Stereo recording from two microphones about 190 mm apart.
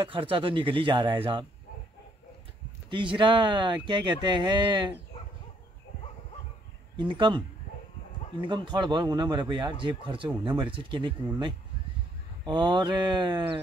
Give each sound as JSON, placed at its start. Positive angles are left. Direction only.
{"t": 0.0, "sound": "speech", "side_deg": -30}
{"t": 2.9, "sound": "speech", "side_deg": -25}
{"t": 7.0, "sound": "speech", "side_deg": -25}
{"t": 8.5, "sound": "speech", "side_deg": -25}